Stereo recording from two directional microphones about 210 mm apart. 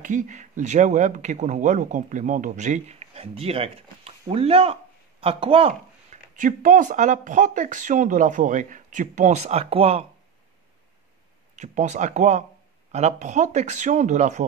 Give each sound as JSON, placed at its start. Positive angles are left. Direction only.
{"t": 0.0, "sound": "speech", "side_deg": -35}
{"t": 6.3, "sound": "speech", "side_deg": -40}
{"t": 11.5, "sound": "speech", "side_deg": -35}